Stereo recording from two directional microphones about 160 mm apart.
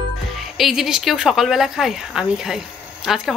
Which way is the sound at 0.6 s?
Centre (ahead or behind).